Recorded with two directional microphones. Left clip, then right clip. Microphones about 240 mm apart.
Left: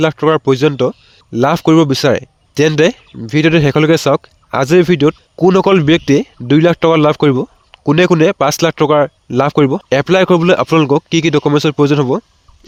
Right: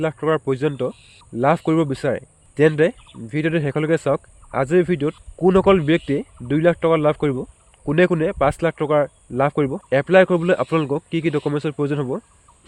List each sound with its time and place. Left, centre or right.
0.0 s speech: left